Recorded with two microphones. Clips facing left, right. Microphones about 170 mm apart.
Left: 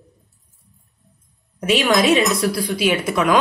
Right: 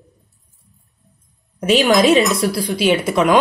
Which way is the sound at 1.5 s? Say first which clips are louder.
Right 4 dB; 35° right (ahead or behind).